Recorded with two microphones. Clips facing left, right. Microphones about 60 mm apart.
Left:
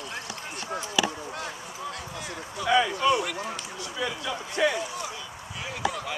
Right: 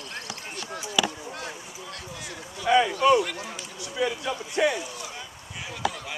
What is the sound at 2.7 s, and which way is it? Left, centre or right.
Speech, centre.